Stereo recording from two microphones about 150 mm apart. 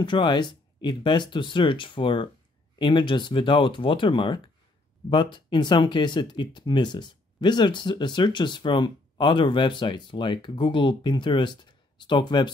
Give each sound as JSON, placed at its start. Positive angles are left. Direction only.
{"t": 0.0, "sound": "speech", "side_deg": 30}